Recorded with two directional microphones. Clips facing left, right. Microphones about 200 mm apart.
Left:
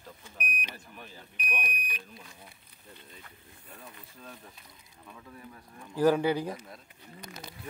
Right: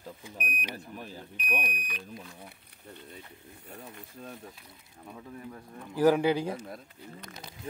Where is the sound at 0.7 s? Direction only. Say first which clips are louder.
Right 6 dB; 35° right (ahead or behind).